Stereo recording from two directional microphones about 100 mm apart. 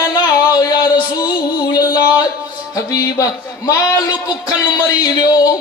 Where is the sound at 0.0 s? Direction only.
30° left (ahead or behind).